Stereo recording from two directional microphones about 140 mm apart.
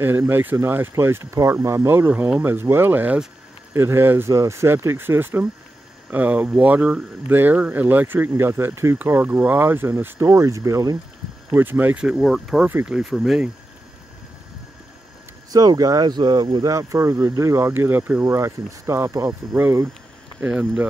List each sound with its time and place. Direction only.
0.0 s speech: 15° right (ahead or behind)
11.5 s speech: 15° right (ahead or behind)
15.5 s speech: 25° right (ahead or behind); by 20.9 s 10° right (ahead or behind)